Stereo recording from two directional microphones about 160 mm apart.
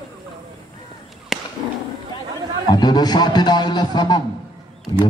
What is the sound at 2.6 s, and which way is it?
Speech, 25° left (ahead or behind).